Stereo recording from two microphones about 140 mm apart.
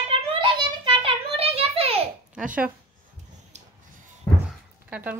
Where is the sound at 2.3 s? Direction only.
10° right (ahead or behind).